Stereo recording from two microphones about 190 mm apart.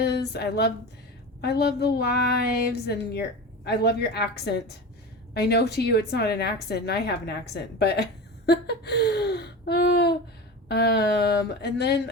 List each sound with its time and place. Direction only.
0.0 s a woman's voice: 60° left (ahead or behind)